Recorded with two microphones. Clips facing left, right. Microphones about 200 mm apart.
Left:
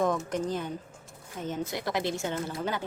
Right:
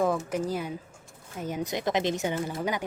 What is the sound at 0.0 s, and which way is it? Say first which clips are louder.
A woman's voice: right 1 dB; 5° right (ahead or behind).